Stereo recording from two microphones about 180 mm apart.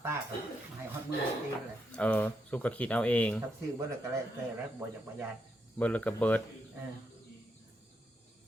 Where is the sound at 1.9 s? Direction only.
5° left (ahead or behind).